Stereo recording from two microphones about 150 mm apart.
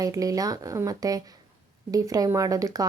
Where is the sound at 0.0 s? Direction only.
25° right (ahead or behind).